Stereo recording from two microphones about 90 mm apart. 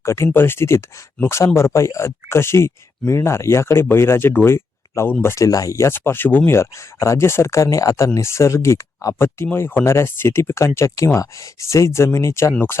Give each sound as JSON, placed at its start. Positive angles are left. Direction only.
{"t": 0.0, "sound": "speech", "side_deg": 30}